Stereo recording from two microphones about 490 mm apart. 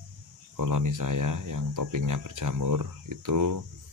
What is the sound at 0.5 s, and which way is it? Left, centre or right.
Speech, right.